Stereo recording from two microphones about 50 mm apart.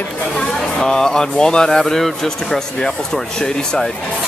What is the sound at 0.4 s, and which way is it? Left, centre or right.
Speech, centre.